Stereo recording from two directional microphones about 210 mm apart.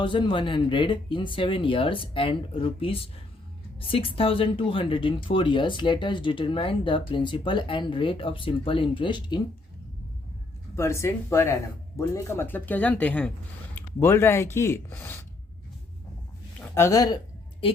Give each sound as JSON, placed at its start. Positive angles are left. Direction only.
{"t": 0.0, "sound": "speech", "side_deg": 25}
{"t": 10.8, "sound": "speech", "side_deg": 15}
{"t": 16.6, "sound": "speech", "side_deg": 10}